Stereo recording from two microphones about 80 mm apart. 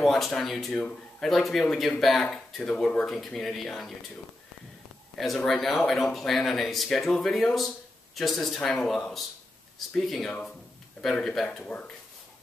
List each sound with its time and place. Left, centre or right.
0.0 s speech: centre
5.1 s speech: centre
11.6 s speech: centre